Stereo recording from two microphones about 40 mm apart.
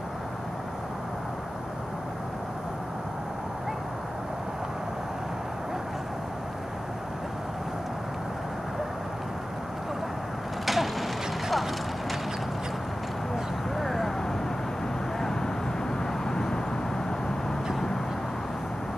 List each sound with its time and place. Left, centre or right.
10.6 s vehicle: centre
13.7 s vehicle: centre
15.1 s vehicle: centre